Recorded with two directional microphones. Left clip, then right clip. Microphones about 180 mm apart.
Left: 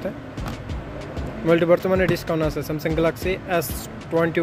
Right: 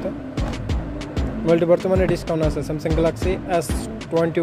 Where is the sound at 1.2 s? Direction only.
5° right (ahead or behind).